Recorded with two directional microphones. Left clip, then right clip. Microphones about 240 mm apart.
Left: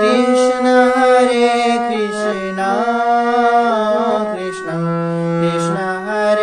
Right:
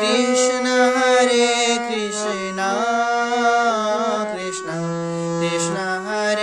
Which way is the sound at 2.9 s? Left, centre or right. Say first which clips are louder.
Left 5 dB; right.